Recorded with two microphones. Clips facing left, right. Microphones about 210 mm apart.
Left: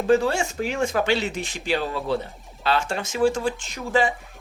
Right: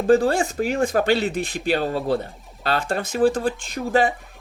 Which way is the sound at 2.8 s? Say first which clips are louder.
Right 5 dB; 55° right (ahead or behind).